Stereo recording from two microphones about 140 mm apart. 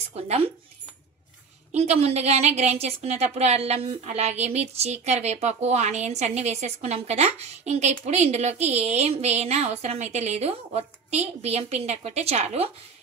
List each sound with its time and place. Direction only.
0.1 s a woman's voice: 50° right (ahead or behind)
1.7 s a woman's voice: 50° right (ahead or behind)